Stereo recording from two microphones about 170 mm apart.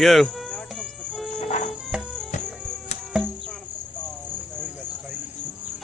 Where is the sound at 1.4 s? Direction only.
40° left (ahead or behind).